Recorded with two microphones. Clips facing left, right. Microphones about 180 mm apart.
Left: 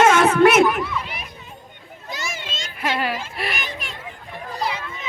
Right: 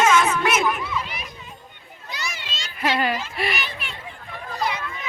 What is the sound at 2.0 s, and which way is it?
Children playing, 45° left (ahead or behind).